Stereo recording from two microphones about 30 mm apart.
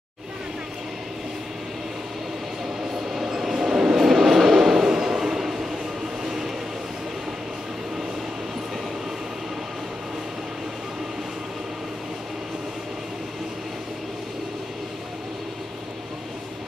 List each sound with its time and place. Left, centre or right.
3.0 s train: centre
3.9 s train: centre
6.2 s a sound: centre